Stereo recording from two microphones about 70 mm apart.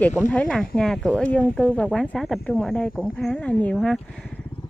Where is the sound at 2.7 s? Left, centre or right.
Centre.